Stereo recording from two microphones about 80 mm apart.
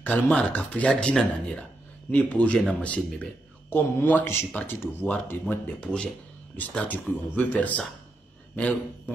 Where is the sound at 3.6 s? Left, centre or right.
Left.